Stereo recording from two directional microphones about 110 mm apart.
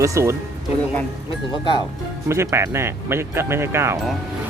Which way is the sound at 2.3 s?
25° right (ahead or behind).